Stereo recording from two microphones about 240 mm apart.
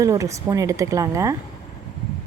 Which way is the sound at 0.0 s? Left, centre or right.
Centre.